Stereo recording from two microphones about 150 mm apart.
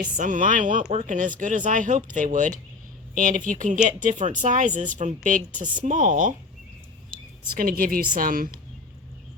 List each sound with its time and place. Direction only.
0.0 s a woman's voice: 60° right (ahead or behind)
7.6 s a woman's voice: 70° right (ahead or behind)